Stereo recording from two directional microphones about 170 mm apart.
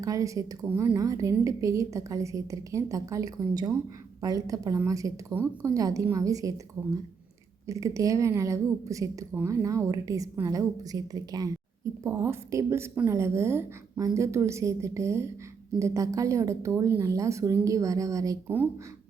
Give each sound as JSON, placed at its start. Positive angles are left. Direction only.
{"t": 0.0, "sound": "a woman's voice", "side_deg": -20}
{"t": 7.7, "sound": "a woman's voice", "side_deg": -20}